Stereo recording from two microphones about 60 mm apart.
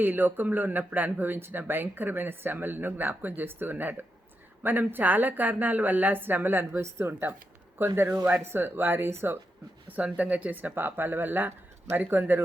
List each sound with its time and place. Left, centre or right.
0.0 s speech: right
9.9 s speech: right